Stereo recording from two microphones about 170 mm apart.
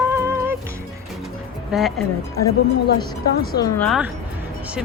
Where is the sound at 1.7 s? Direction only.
5° right (ahead or behind).